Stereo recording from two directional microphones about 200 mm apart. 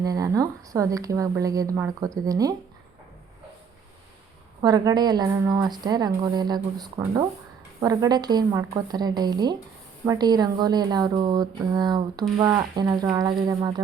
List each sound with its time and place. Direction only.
0.0 s speech: 15° right (ahead or behind)
4.6 s a woman's voice: 20° right (ahead or behind)